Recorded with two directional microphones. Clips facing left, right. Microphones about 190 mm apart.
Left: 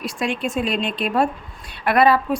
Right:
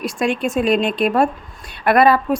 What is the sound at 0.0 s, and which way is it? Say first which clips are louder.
Speech: right 4 dB; 45° right (ahead or behind).